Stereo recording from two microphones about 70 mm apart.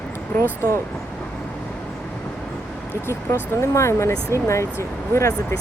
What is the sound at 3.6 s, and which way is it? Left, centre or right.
Speech, left.